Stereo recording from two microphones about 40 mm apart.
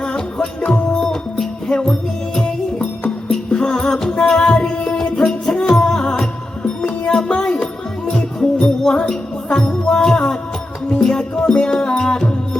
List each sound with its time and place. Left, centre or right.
0.0 s music: left
0.9 s music: centre